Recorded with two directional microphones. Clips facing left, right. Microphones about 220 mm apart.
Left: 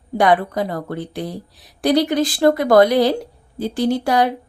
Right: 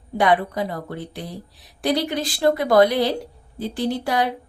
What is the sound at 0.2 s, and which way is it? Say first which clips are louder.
Speech: left 3 dB; 45° left (ahead or behind).